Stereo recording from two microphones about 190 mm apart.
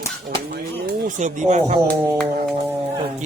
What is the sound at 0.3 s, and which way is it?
Speech, 50° right (ahead or behind).